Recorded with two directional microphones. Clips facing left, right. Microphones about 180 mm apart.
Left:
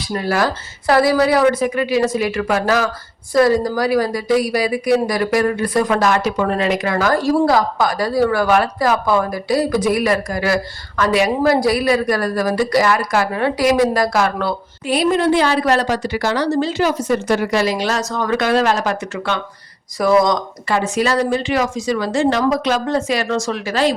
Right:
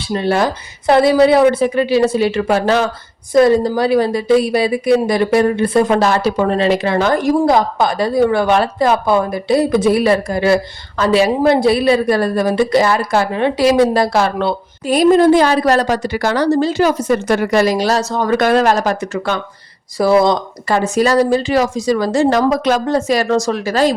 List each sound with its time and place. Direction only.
0.0 s a woman's voice: 25° right (ahead or behind)
14.8 s a woman's voice: 45° right (ahead or behind)
20.0 s a woman's voice: 30° right (ahead or behind)
20.7 s a woman's voice: 40° right (ahead or behind)